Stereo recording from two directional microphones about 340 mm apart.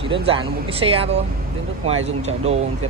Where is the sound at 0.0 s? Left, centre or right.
Centre.